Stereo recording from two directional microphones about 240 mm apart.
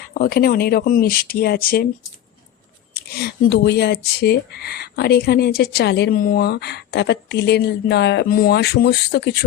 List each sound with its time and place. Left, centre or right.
0.0 s speech: left
2.9 s speech: left